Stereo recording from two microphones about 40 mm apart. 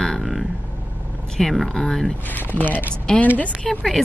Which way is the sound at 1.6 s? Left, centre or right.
Centre.